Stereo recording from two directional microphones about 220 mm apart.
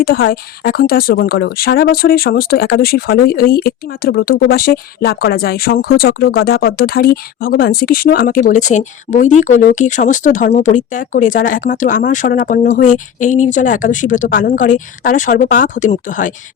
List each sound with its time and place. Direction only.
0.3 s speech: 45° left (ahead or behind)